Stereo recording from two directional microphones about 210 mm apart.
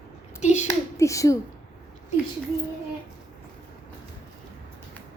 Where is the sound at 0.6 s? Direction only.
15° left (ahead or behind).